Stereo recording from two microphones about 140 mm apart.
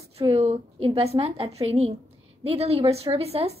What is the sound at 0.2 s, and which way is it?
A woman's voice, 45° right (ahead or behind).